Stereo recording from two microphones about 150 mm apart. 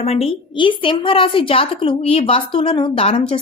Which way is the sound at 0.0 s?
40° left (ahead or behind).